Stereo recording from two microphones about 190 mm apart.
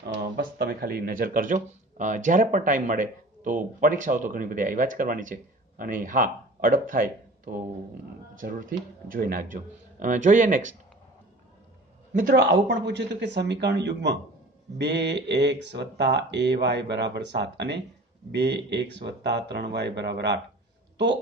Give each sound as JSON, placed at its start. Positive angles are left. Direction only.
{"t": 0.0, "sound": "speech", "side_deg": -50}
{"t": 12.1, "sound": "a man's voice", "side_deg": -45}
{"t": 12.4, "sound": "speech", "side_deg": -65}